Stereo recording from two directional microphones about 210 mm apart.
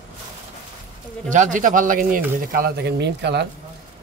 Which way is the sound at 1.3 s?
35° right (ahead or behind).